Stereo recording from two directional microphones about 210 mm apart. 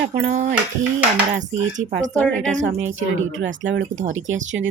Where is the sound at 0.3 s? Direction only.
35° right (ahead or behind).